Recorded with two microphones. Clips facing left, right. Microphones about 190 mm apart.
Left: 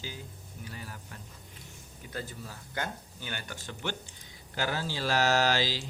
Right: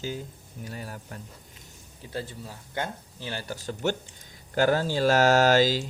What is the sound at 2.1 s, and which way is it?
Speech, 30° right (ahead or behind).